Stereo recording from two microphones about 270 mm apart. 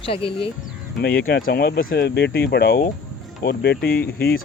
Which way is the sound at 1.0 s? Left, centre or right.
Left.